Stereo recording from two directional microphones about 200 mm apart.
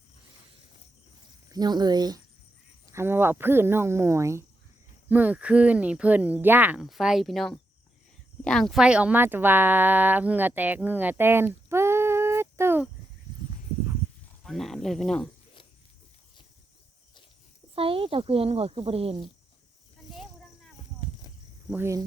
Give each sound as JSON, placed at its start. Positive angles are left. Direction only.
{"t": 1.5, "sound": "speech", "side_deg": -20}
{"t": 14.4, "sound": "speech", "side_deg": 0}
{"t": 17.7, "sound": "speech", "side_deg": -25}
{"t": 21.7, "sound": "speech", "side_deg": -10}